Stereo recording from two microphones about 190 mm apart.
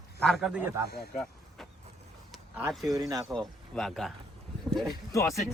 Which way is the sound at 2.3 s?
10° right (ahead or behind).